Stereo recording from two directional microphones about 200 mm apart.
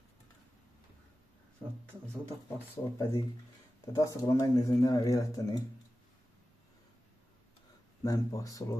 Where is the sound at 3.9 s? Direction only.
15° left (ahead or behind).